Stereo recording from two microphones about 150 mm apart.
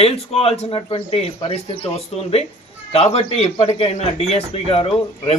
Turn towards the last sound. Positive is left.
turn(degrees=40)  # may be behind; listen again after turning